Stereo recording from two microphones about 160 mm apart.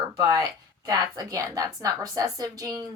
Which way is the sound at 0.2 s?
20° right (ahead or behind).